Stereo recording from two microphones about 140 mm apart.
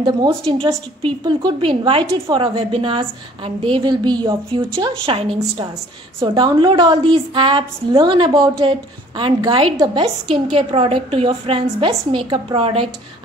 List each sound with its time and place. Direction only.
0.0 s a woman's voice: 30° right (ahead or behind)